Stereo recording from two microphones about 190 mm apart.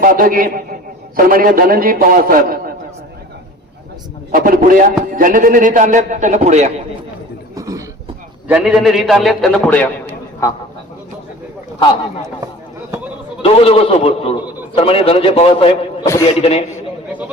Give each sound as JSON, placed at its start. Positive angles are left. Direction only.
{"t": 0.0, "sound": "a man's voice", "side_deg": -45}
{"t": 4.4, "sound": "a man's voice", "side_deg": -45}
{"t": 7.5, "sound": "a sound", "side_deg": -15}
{"t": 8.4, "sound": "a man's voice", "side_deg": -5}
{"t": 13.4, "sound": "a man's voice", "side_deg": 30}
{"t": 17.1, "sound": "speech", "side_deg": -10}